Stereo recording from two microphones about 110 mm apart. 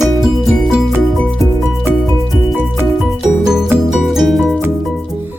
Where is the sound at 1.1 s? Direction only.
10° left (ahead or behind).